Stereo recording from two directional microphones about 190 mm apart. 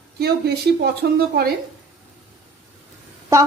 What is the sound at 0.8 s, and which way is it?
Speech, 55° right (ahead or behind).